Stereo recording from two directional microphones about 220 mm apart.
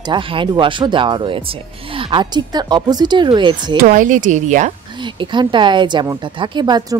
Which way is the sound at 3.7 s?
40° right (ahead or behind).